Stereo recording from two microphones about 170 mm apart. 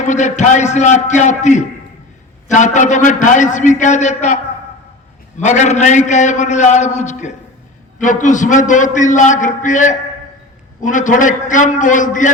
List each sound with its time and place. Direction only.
0.0 s a man's voice: 45° left (ahead or behind)
5.4 s a man's voice: 45° left (ahead or behind)